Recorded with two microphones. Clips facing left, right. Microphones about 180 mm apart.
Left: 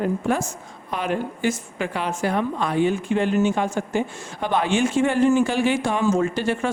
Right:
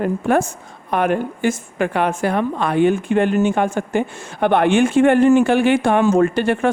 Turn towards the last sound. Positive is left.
turn(degrees=-60)  # may be behind; listen again after turning